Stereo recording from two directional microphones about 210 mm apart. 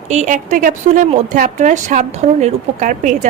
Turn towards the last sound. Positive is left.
turn(degrees=-35)  # may be behind; listen again after turning